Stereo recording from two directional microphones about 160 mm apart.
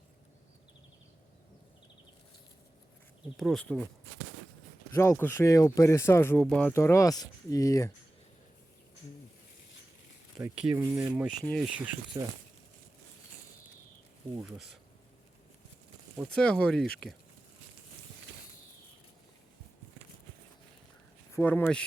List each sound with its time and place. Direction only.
3.3 s speech: centre (ahead or behind)
4.9 s speech: 15° left (ahead or behind)
10.4 s speech: 5° right (ahead or behind)
11.4 s speech: 5° left (ahead or behind)
12.1 s speech: 20° right (ahead or behind)
14.4 s speech: centre (ahead or behind)
16.2 s speech: 5° left (ahead or behind)
21.3 s speech: 10° left (ahead or behind)